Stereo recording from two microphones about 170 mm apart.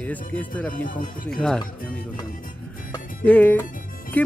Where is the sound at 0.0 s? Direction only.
10° left (ahead or behind).